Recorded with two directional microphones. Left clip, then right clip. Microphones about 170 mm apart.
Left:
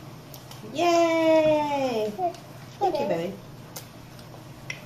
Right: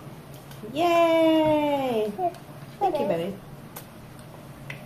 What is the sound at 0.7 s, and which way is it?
Speech, 20° right (ahead or behind).